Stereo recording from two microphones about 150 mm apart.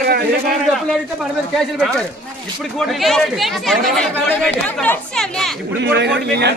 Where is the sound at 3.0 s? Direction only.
Centre (ahead or behind).